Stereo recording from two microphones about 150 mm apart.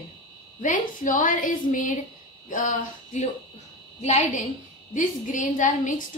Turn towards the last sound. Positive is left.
turn(degrees=60)  # may be behind; listen again after turning